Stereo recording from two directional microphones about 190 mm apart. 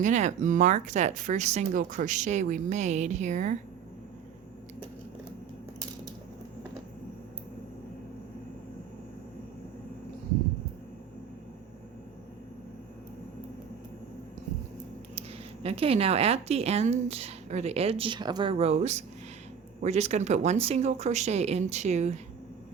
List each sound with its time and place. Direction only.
0.0 s speech: 40° right (ahead or behind)
15.6 s speech: 30° right (ahead or behind)
18.5 s speech: 35° right (ahead or behind)